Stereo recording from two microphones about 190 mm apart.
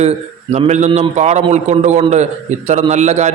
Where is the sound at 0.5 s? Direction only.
35° right (ahead or behind).